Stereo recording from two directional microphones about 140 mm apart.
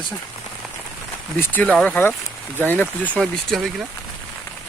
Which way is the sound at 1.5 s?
10° left (ahead or behind).